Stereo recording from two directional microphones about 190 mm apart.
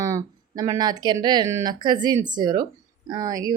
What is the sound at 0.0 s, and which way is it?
A woman's voice, 15° right (ahead or behind).